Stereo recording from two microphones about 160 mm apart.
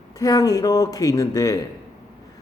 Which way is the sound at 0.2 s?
20° left (ahead or behind).